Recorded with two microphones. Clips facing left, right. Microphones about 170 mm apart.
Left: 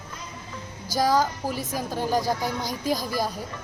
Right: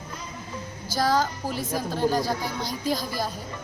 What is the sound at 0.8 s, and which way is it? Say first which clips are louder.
A woman's voice: left 2 dB; 15° left (ahead or behind).